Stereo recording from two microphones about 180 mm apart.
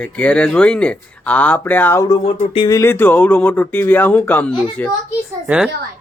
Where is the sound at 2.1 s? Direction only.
30° left (ahead or behind).